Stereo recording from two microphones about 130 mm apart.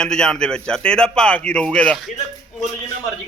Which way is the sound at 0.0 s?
5° left (ahead or behind).